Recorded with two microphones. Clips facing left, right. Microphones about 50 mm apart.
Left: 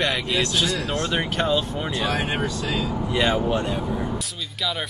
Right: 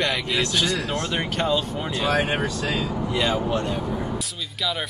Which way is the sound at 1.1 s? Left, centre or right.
Centre.